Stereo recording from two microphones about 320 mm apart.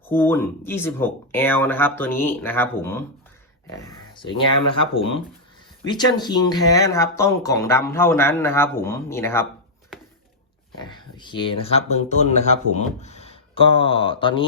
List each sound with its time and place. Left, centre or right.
0.1 s speech: centre
10.8 s speech: centre